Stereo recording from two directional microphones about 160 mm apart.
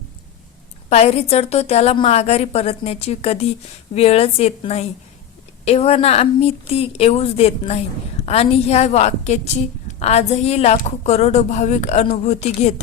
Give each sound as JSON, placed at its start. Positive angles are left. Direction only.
{"t": 0.9, "sound": "a woman's voice", "side_deg": 40}